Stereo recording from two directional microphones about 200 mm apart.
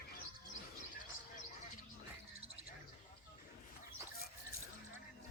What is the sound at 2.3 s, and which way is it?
Wild animals, 30° right (ahead or behind).